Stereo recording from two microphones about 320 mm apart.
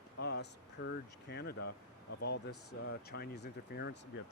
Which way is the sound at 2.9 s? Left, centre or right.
Left.